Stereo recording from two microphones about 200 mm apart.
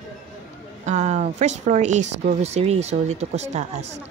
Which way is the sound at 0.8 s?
35° right (ahead or behind).